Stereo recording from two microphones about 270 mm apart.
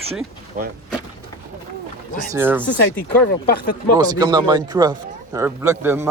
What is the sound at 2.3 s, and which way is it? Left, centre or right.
Speech, centre.